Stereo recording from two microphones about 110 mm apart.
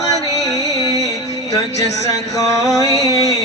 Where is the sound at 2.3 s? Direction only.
30° left (ahead or behind).